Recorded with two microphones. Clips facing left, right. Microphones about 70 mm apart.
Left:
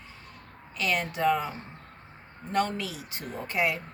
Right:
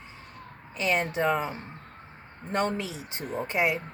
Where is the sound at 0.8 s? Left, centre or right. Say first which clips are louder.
Right 1 dB; right.